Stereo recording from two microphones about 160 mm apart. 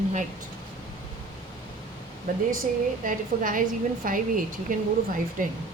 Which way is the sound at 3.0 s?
55° right (ahead or behind).